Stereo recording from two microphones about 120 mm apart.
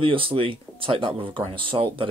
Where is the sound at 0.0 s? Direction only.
45° right (ahead or behind).